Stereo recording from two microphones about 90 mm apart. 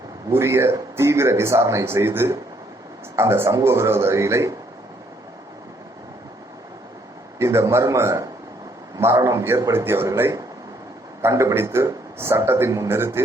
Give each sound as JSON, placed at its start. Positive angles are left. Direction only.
{"t": 0.3, "sound": "speech", "side_deg": -30}
{"t": 7.3, "sound": "a man's voice", "side_deg": -30}